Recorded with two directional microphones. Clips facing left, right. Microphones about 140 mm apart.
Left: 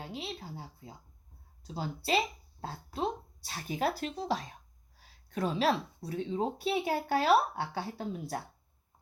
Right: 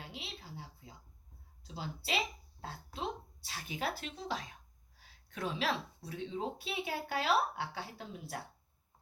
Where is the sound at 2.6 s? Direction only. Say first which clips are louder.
Left 7 dB; 40° left (ahead or behind).